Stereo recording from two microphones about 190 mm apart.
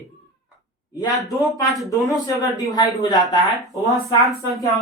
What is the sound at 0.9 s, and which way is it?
Speech, 20° left (ahead or behind).